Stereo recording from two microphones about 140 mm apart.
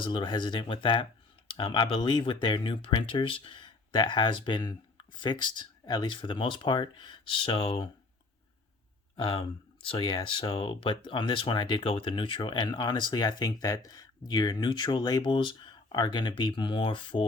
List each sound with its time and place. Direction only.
0.0 s speech: 35° left (ahead or behind)
9.1 s speech: 35° left (ahead or behind)